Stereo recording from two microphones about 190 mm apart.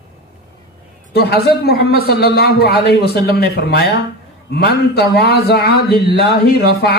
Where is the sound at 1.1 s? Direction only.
55° left (ahead or behind).